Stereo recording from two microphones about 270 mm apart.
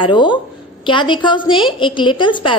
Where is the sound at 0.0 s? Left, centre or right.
Centre.